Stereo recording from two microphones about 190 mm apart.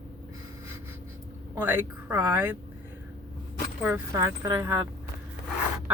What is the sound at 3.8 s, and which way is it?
Speech, 10° right (ahead or behind).